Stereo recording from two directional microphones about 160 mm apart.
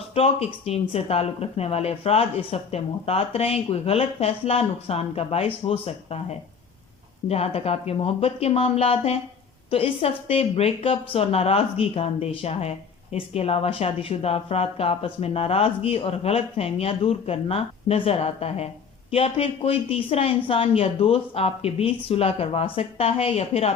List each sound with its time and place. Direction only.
0.1 s a woman's voice: 40° left (ahead or behind)
7.3 s a woman's voice: 40° left (ahead or behind)